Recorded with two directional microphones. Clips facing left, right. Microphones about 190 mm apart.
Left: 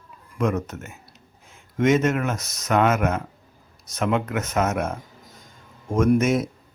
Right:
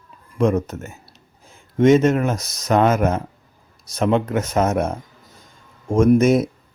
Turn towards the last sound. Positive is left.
turn(degrees=-35)  # may be behind; listen again after turning